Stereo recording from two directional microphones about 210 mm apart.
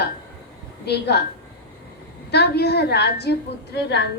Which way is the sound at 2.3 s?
50° left (ahead or behind).